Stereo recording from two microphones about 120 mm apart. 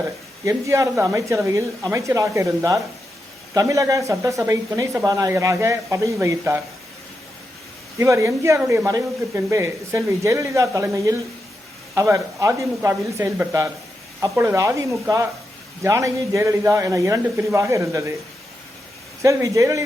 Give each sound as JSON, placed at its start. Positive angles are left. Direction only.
{"t": 0.4, "sound": "speech", "side_deg": -25}
{"t": 7.9, "sound": "speech", "side_deg": -25}
{"t": 19.2, "sound": "speech", "side_deg": -25}